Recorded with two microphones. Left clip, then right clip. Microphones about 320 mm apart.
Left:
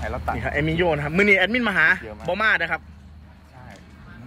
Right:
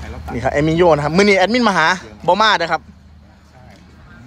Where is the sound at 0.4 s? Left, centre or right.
Right.